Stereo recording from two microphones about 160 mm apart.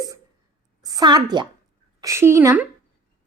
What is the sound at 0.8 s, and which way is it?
A woman's voice, 25° right (ahead or behind).